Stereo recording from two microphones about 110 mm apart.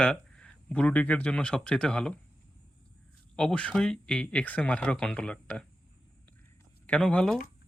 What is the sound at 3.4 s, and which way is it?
Speech, 10° left (ahead or behind).